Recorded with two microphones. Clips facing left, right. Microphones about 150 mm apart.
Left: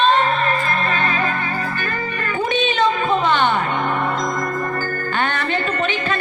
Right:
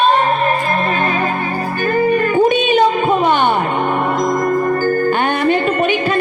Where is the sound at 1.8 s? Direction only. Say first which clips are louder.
Right 12 dB; 40° right (ahead or behind).